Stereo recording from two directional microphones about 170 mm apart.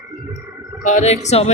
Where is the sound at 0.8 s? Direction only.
45° left (ahead or behind).